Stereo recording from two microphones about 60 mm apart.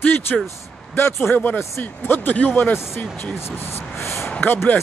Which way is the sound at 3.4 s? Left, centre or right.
Left.